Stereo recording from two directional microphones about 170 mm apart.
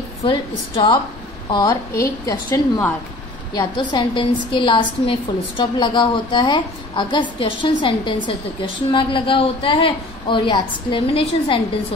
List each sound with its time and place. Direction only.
0.2 s a woman's voice: 30° left (ahead or behind)